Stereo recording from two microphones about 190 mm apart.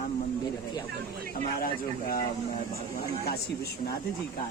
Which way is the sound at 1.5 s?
50° left (ahead or behind).